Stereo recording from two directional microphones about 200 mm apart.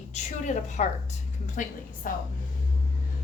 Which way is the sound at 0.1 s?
35° left (ahead or behind).